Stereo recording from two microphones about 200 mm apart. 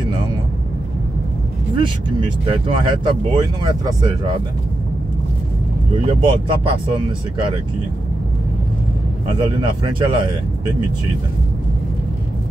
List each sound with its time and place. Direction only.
1.8 s speech: 25° right (ahead or behind)
6.0 s speech: 25° right (ahead or behind)
9.4 s speech: 25° right (ahead or behind)